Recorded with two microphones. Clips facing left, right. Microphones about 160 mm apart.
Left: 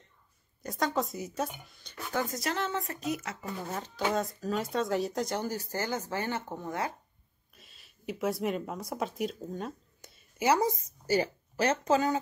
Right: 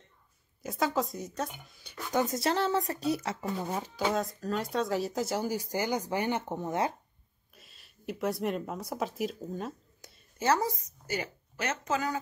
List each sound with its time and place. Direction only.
0.6 s a woman's voice: 5° right (ahead or behind)
2.1 s speech: 25° right (ahead or behind)
3.5 s speech: 15° right (ahead or behind)
7.5 s speech: centre (ahead or behind)
10.4 s a woman's voice: 15° left (ahead or behind)